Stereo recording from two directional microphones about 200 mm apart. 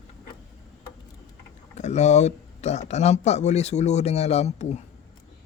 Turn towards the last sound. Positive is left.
turn(degrees=35)  # may be behind; listen again after turning